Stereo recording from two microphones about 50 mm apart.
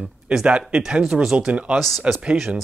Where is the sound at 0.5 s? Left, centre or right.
Right.